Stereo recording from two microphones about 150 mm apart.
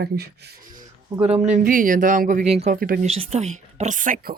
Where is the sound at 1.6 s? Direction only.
65° right (ahead or behind).